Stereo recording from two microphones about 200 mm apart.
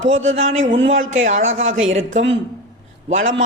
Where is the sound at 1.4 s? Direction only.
75° right (ahead or behind).